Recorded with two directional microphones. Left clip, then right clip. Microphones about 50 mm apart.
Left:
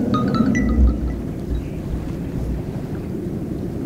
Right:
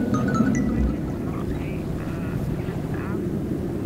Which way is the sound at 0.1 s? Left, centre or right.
Left.